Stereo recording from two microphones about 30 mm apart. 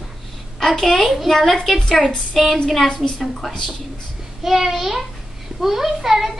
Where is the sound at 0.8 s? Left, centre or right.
Centre.